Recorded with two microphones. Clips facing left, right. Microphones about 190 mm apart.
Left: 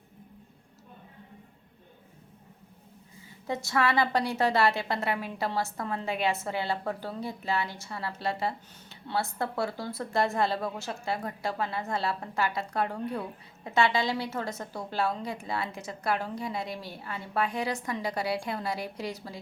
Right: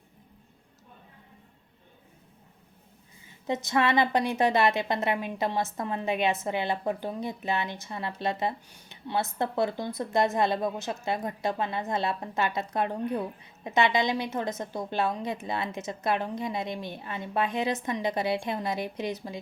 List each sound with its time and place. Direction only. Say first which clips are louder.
3.4 s a woman's voice: right 2 dB; 20° right (ahead or behind)